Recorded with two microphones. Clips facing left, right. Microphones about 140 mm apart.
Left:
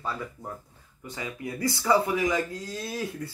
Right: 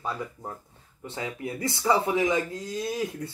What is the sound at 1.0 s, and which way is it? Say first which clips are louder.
Speech: right 2 dB; 25° right (ahead or behind).